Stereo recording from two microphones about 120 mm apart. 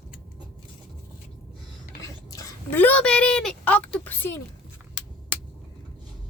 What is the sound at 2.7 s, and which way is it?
A woman's voice, 15° left (ahead or behind).